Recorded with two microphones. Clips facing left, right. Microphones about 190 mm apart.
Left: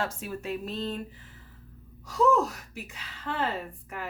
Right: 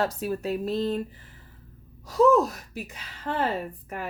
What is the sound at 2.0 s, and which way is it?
Speech, 35° right (ahead or behind).